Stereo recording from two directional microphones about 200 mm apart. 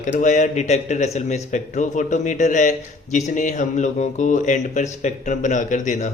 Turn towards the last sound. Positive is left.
turn(degrees=40)  # may be behind; listen again after turning